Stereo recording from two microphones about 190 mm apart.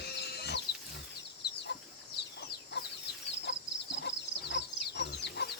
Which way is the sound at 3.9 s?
70° left (ahead or behind).